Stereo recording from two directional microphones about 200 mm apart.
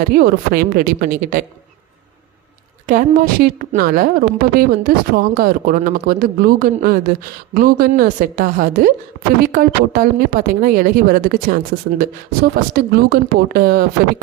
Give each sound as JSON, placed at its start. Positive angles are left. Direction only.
{"t": 0.1, "sound": "speech", "side_deg": -50}
{"t": 2.8, "sound": "speech", "side_deg": -45}